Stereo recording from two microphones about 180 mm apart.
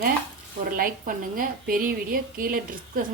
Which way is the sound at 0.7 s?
50° right (ahead or behind).